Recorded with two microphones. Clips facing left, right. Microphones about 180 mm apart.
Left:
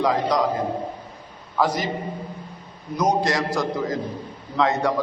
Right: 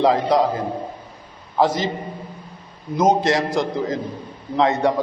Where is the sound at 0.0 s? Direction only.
30° right (ahead or behind).